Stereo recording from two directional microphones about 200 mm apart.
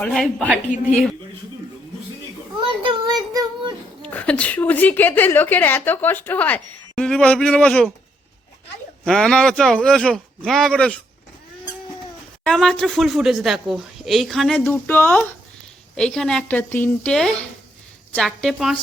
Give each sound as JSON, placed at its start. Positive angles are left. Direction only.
{"t": 0.0, "sound": "speech", "side_deg": 0}
{"t": 0.7, "sound": "a woman's voice", "side_deg": 40}
{"t": 3.1, "sound": "child singing", "side_deg": -20}
{"t": 4.0, "sound": "a woman's voice", "side_deg": 5}
{"t": 9.0, "sound": "speech", "side_deg": 5}
{"t": 12.5, "sound": "speech", "side_deg": 0}